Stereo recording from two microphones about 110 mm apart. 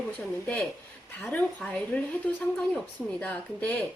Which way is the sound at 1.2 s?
10° left (ahead or behind).